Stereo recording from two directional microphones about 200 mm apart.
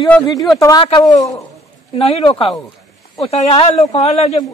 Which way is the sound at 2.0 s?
30° left (ahead or behind).